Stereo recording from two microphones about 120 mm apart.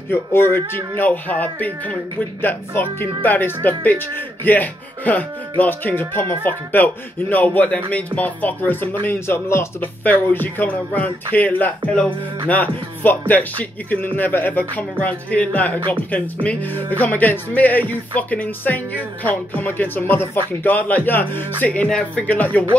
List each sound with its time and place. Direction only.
0.1 s speech: 20° left (ahead or behind)
17.0 s speech: 15° left (ahead or behind)